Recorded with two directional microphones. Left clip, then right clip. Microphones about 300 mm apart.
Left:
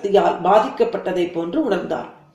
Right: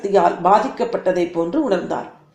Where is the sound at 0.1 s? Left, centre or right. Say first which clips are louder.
Right 1 dB; centre.